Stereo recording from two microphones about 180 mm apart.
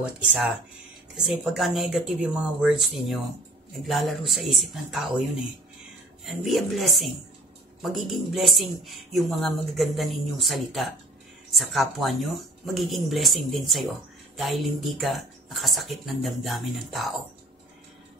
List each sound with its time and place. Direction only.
0.3 s speech: 5° right (ahead or behind)
6.2 s speech: centre (ahead or behind)